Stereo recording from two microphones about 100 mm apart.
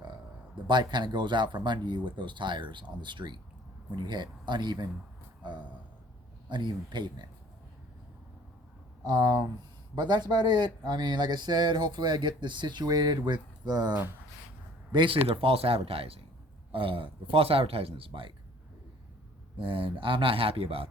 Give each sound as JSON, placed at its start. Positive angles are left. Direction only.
{"t": 0.7, "sound": "speech", "side_deg": -50}
{"t": 9.0, "sound": "speech", "side_deg": -40}
{"t": 14.9, "sound": "speech", "side_deg": -60}
{"t": 16.7, "sound": "a man's voice", "side_deg": -60}
{"t": 19.5, "sound": "a man's voice", "side_deg": -60}